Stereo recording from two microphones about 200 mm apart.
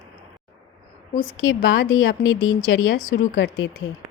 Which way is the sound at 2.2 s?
90° left.